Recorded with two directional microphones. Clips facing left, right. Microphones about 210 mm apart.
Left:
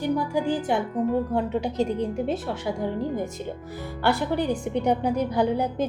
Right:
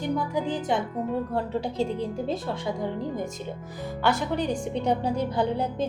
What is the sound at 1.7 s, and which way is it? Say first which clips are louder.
Speech: left 3 dB; 70° left (ahead or behind).